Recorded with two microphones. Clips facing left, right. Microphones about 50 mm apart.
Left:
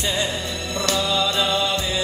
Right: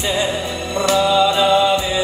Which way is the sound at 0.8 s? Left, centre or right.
Centre.